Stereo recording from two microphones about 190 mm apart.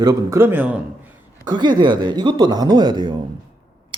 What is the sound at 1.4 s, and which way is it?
Speech, 20° right (ahead or behind).